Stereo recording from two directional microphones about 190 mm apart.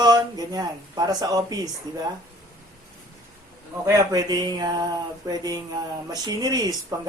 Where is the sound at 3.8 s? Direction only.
20° right (ahead or behind).